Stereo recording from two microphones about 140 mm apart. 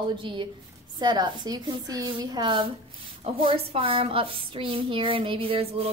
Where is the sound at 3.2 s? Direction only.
40° right (ahead or behind).